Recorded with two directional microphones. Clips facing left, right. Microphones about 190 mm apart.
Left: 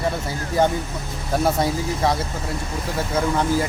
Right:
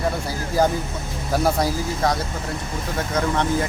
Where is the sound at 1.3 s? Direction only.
Centre (ahead or behind).